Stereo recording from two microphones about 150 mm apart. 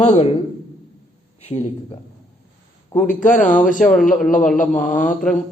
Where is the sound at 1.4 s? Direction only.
45° left (ahead or behind).